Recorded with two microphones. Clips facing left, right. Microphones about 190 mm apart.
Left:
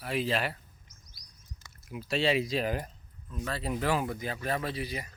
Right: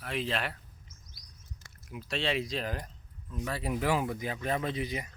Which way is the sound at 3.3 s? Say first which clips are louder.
Even; 15° right (ahead or behind).